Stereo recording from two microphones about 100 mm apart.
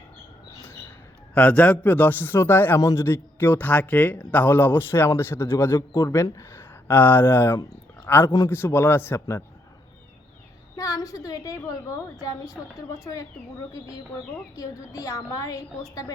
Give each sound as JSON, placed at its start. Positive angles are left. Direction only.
{"t": 1.3, "sound": "a man's voice", "side_deg": 15}
{"t": 10.8, "sound": "a woman's voice", "side_deg": 35}
{"t": 14.5, "sound": "a woman's voice", "side_deg": 35}